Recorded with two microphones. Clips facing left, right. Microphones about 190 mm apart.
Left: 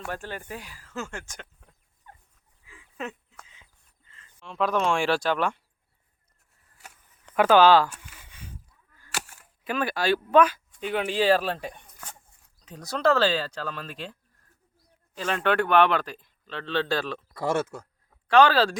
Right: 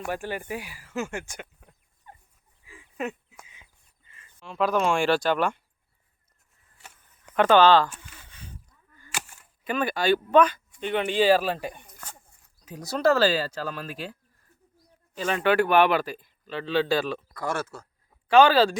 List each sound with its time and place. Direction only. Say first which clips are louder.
0.0 s speech: right 4 dB; 10° right (ahead or behind)
2.6 s a sound: right 4 dB; 10° right (ahead or behind)
4.1 s speech: right 1 dB; 10° right (ahead or behind)
7.3 s speech: even; 5° left (ahead or behind)
7.9 s a sound: even; 5° left (ahead or behind)
10.8 s speech: right 2 dB; 5° left (ahead or behind)
17.3 s speech: left 8 dB; 25° left (ahead or behind)
18.3 s speech: right 2 dB; 5° right (ahead or behind)